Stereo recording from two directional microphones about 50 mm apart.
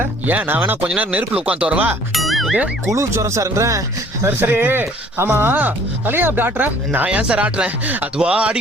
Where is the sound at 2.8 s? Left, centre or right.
Right.